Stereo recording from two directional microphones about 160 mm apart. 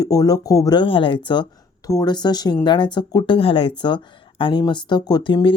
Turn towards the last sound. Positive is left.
turn(degrees=30)  # may be behind; listen again after turning